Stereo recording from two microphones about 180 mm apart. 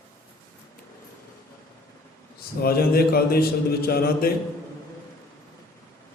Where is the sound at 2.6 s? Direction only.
60° left (ahead or behind).